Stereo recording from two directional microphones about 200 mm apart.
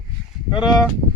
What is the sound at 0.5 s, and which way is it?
Speech, 20° left (ahead or behind).